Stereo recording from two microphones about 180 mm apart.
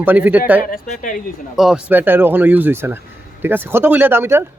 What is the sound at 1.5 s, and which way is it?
Speech, 5° right (ahead or behind).